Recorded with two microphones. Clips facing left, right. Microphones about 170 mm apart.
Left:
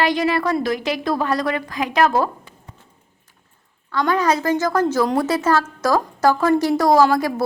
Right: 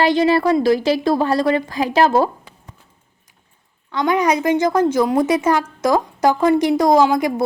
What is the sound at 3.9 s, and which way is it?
A woman's voice, 20° right (ahead or behind).